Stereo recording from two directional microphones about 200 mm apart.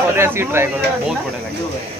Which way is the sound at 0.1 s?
10° right (ahead or behind).